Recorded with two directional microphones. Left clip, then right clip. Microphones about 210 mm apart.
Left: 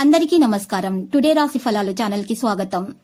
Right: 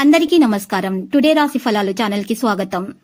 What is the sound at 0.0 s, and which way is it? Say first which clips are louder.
A woman's voice: right 2 dB; 15° right (ahead or behind).